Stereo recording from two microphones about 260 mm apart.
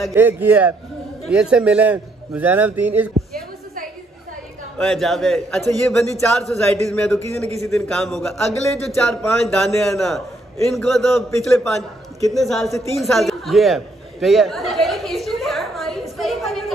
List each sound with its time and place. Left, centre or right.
0.0 s a man's voice: centre
4.7 s a man's voice: centre
12.9 s chatter: centre